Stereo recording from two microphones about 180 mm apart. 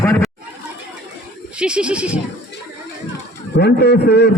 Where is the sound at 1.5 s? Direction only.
5° right (ahead or behind).